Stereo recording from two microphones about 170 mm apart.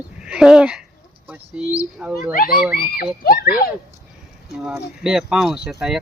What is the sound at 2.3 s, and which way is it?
Speech, 60° left (ahead or behind).